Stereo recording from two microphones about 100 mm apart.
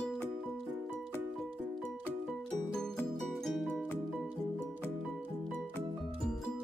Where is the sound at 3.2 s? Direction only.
Centre (ahead or behind).